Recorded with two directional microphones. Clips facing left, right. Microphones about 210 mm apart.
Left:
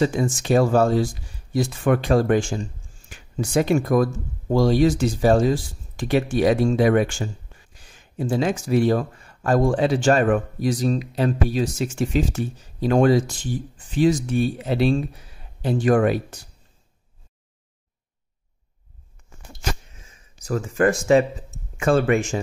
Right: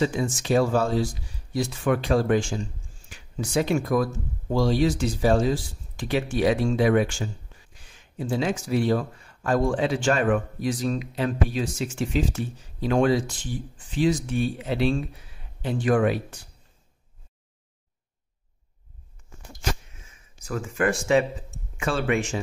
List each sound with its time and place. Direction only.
0.0 s speech: 45° left (ahead or behind)
20.4 s speech: 40° left (ahead or behind)